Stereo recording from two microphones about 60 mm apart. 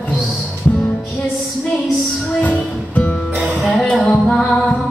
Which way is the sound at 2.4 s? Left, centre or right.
Left.